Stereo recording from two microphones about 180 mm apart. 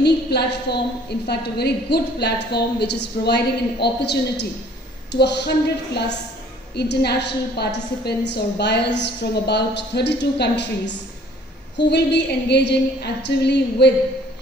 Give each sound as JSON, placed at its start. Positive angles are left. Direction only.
{"t": 0.0, "sound": "a woman's voice", "side_deg": 65}
{"t": 6.7, "sound": "a woman's voice", "side_deg": 65}